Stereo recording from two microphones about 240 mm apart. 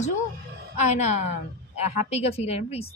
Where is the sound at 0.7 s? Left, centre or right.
Left.